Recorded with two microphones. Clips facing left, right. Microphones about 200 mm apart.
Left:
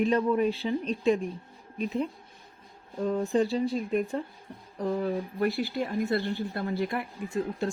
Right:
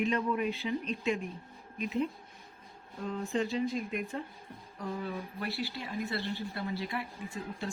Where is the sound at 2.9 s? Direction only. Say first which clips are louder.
Left 7 dB; 35° left (ahead or behind).